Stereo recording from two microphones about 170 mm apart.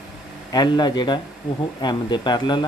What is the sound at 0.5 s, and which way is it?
Speech, 25° left (ahead or behind).